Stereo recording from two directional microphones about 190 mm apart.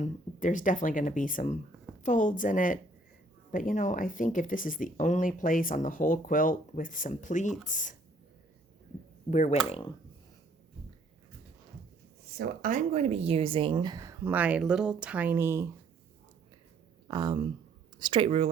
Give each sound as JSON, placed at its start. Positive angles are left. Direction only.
{"t": 0.0, "sound": "speech", "side_deg": 40}
{"t": 9.3, "sound": "speech", "side_deg": 40}
{"t": 12.4, "sound": "speech", "side_deg": -45}
{"t": 17.1, "sound": "speech", "side_deg": -20}